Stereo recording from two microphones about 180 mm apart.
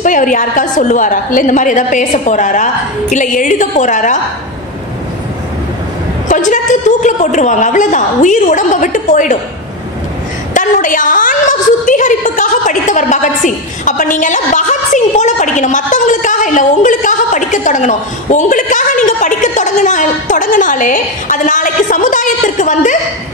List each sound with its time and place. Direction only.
0.0 s a woman's voice: 45° left (ahead or behind)
6.2 s a woman's voice: 45° left (ahead or behind)
10.5 s a woman's voice: 45° left (ahead or behind)